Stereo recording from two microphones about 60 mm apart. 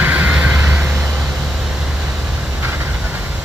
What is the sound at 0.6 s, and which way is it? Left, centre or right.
Vehicle, right.